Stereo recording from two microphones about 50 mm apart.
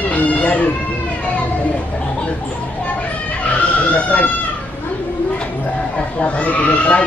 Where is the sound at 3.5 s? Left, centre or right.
Left.